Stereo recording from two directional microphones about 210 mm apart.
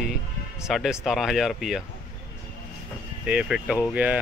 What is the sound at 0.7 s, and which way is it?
Speech, centre (ahead or behind).